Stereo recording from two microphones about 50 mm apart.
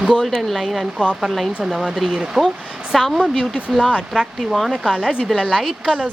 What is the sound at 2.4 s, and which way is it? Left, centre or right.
Speech, centre.